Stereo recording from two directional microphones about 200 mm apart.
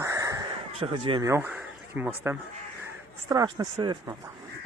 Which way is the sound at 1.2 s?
10° right (ahead or behind).